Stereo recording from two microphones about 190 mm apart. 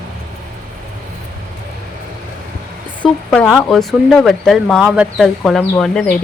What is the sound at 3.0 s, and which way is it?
Speech, 5° left (ahead or behind).